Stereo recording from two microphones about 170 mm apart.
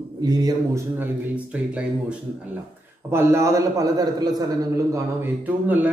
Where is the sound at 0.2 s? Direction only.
25° right (ahead or behind).